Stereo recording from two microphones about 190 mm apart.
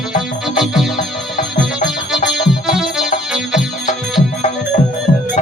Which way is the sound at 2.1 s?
Centre (ahead or behind).